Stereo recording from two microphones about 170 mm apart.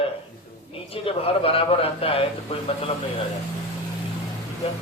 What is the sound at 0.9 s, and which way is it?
A man's voice, 35° left (ahead or behind).